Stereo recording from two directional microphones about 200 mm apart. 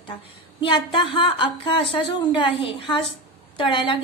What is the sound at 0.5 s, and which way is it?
A woman's voice, 25° left (ahead or behind).